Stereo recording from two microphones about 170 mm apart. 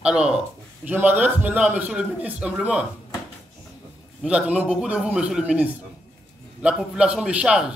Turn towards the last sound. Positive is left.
turn(degrees=-5)  # may be behind; listen again after turning